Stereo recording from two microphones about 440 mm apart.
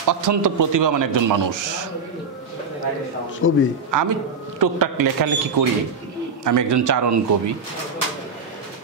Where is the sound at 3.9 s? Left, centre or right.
Right.